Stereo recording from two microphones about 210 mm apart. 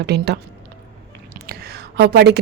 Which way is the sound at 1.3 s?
45° right (ahead or behind).